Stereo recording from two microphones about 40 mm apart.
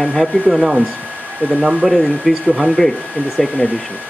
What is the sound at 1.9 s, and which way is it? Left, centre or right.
Speech, centre.